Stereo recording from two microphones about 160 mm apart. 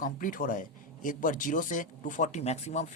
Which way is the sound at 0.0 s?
60° left (ahead or behind).